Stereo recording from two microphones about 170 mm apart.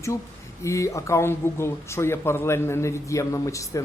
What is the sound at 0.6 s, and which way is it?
Speech, 15° left (ahead or behind).